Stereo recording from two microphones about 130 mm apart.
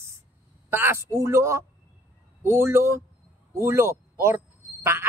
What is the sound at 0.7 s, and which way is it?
A man's voice, 20° right (ahead or behind).